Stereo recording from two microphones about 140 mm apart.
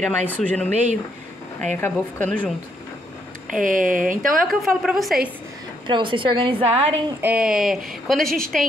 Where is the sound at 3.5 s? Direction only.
70° right (ahead or behind).